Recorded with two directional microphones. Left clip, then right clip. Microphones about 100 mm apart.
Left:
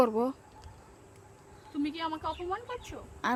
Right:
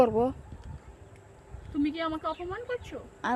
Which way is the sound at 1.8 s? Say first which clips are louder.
Right 3 dB; 25° left (ahead or behind).